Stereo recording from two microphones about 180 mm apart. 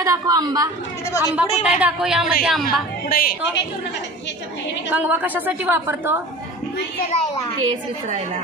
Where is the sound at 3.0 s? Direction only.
55° left (ahead or behind).